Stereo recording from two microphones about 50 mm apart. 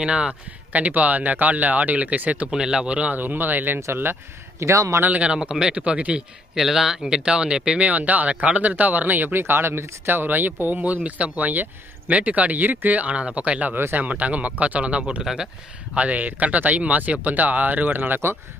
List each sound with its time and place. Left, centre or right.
0.0 s speech: centre
2.5 s speech: centre
3.2 s speech: right
3.8 s speech: right
4.6 s a man's voice: right
5.1 s speech: right
6.5 s speech: centre
7.8 s speech: right
15.2 s speech: centre
16.0 s speech: right